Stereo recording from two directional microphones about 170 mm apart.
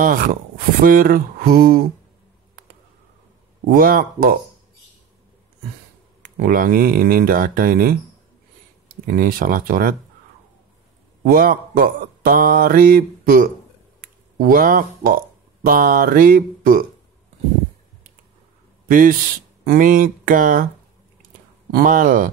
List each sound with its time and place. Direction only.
0.0 s speech: 55° right (ahead or behind)
3.7 s speech: 60° right (ahead or behind)
6.2 s speech: 55° right (ahead or behind)
11.2 s speech: 55° right (ahead or behind)
18.9 s speech: 55° right (ahead or behind)
21.7 s speech: 55° right (ahead or behind)